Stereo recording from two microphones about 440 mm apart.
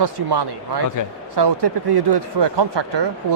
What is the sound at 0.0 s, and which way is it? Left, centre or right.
Speech, right.